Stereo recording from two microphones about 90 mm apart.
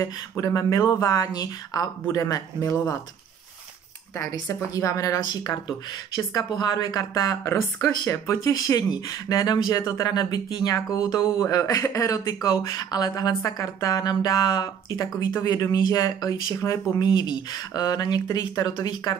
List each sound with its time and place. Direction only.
0.0 s a woman's voice: 40° left (ahead or behind)
4.2 s a woman's voice: 35° left (ahead or behind)
5.3 s a woman's voice: 50° left (ahead or behind)